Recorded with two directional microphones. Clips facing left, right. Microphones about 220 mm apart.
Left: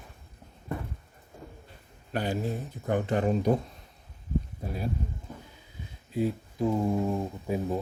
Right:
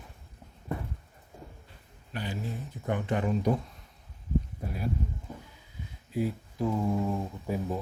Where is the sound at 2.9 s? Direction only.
35° left (ahead or behind).